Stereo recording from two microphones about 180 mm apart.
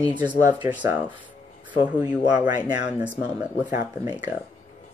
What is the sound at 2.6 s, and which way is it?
Speech, 25° right (ahead or behind).